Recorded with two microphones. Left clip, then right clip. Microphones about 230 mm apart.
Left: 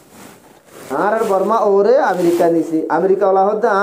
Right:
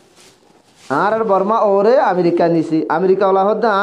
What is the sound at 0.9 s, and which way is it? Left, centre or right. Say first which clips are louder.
Speech: right 1 dB; right.